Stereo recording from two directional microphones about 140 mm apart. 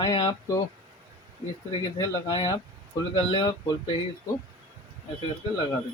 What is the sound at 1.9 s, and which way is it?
Speech, 30° left (ahead or behind).